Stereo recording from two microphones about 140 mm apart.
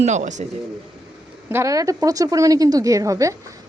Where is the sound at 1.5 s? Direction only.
20° right (ahead or behind).